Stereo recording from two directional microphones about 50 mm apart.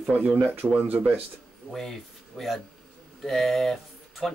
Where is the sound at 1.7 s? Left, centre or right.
Centre.